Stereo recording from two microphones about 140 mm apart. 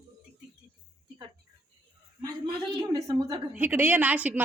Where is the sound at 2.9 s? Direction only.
30° right (ahead or behind).